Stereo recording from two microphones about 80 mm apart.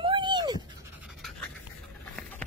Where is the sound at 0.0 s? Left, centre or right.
Right.